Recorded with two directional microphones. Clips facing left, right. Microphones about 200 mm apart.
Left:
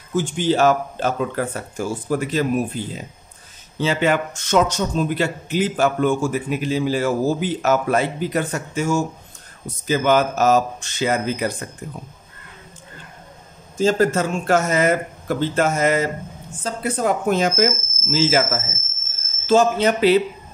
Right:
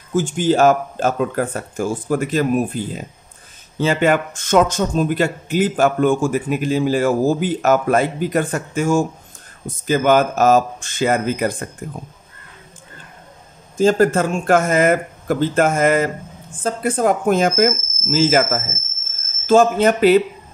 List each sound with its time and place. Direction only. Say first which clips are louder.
0.1 s speech: right 3 dB; 50° right (ahead or behind)
3.8 s speech: right 3 dB; 50° right (ahead or behind)
13.7 s speech: right 3 dB; 50° right (ahead or behind)